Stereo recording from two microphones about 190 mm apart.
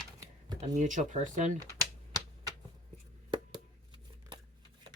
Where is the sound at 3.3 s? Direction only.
25° right (ahead or behind).